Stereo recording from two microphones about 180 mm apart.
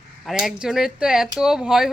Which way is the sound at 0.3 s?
Centre (ahead or behind).